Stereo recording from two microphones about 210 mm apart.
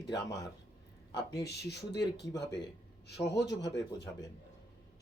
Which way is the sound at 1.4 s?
50° left (ahead or behind).